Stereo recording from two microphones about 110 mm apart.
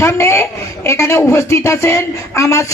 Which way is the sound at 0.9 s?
25° left (ahead or behind).